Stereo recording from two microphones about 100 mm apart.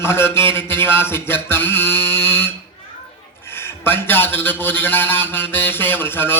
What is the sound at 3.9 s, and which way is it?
Speech, 20° left (ahead or behind).